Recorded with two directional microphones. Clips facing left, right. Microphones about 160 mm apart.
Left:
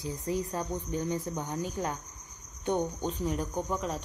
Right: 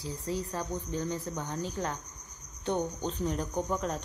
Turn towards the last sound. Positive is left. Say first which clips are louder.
# right 1 dB
turn(degrees=0)  # may be behind; listen again after turning